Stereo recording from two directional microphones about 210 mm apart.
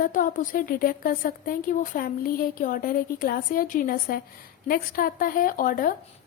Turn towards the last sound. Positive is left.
turn(degrees=40)  # may be behind; listen again after turning